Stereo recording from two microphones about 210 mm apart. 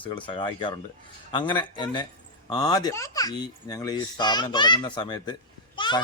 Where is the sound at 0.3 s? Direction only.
25° left (ahead or behind).